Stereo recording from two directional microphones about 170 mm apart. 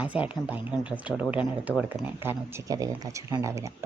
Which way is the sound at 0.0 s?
10° right (ahead or behind).